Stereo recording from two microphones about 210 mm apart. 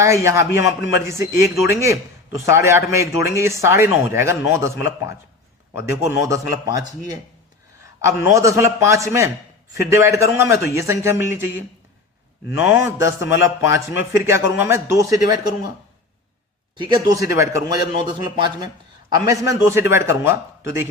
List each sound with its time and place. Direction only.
0.0 s a man's voice: 15° right (ahead or behind)
12.5 s a man's voice: 10° right (ahead or behind)
16.7 s a man's voice: 20° right (ahead or behind)
19.1 s a man's voice: 15° right (ahead or behind)